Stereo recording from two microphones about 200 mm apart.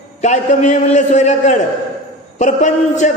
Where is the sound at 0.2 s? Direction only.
35° left (ahead or behind).